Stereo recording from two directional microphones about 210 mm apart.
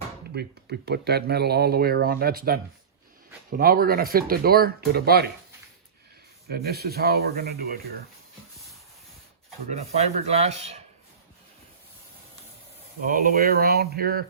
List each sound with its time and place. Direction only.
0.3 s speech: 50° right (ahead or behind)
6.5 s speech: 45° right (ahead or behind)
9.6 s speech: 30° right (ahead or behind)
13.1 s speech: 40° right (ahead or behind)